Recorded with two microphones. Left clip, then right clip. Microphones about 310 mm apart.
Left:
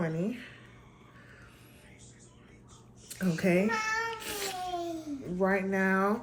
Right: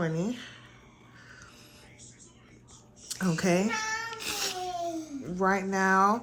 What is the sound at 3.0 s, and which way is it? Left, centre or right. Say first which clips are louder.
Speech: right 2 dB; centre.